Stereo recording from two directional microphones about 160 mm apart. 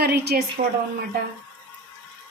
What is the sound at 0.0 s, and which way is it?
Speech, 80° right.